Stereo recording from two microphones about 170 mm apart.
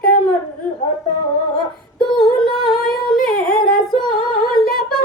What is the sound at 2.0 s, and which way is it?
Female singing, 25° left (ahead or behind).